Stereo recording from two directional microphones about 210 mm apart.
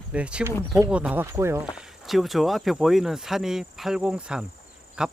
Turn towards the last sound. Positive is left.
turn(degrees=-5)  # may be behind; listen again after turning